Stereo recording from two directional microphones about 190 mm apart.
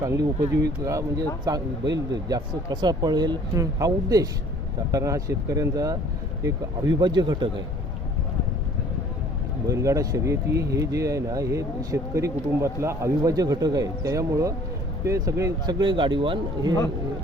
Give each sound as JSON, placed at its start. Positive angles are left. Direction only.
{"t": 0.0, "sound": "speech", "side_deg": -15}
{"t": 2.3, "sound": "speech", "side_deg": -20}
{"t": 9.6, "sound": "speech", "side_deg": -15}